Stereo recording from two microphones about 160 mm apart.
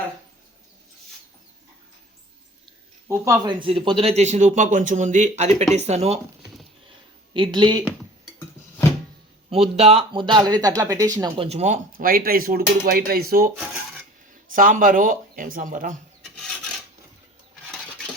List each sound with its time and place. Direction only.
3.1 s speech: 20° right (ahead or behind)
3.6 s speech: 35° right (ahead or behind)
7.3 s speech: 30° right (ahead or behind)
9.5 s speech: 40° right (ahead or behind); by 11.3 s 20° right (ahead or behind)
11.3 s speech: 40° right (ahead or behind); by 13.5 s 65° right (ahead or behind)
14.5 s speech: 60° right (ahead or behind)